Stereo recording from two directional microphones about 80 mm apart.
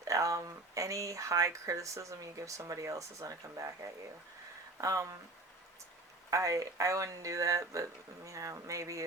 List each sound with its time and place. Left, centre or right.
0.0 s speech: right
6.3 s speech: right